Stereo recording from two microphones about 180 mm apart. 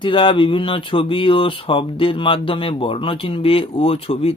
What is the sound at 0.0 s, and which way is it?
Speech, 30° left (ahead or behind).